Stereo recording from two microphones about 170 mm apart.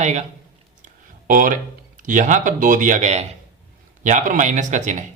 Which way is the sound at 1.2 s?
50° right (ahead or behind).